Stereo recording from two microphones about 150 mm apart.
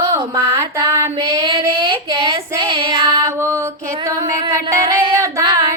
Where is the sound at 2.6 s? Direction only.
30° right (ahead or behind).